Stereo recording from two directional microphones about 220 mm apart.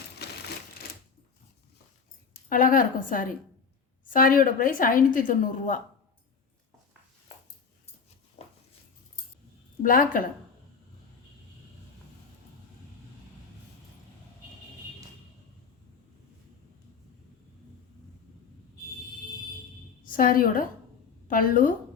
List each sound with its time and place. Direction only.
0.2 s typewriter: 50° left (ahead or behind)
2.5 s a woman's voice: 40° left (ahead or behind)
9.8 s a woman's voice: 40° left (ahead or behind)
20.1 s a woman's voice: 40° left (ahead or behind)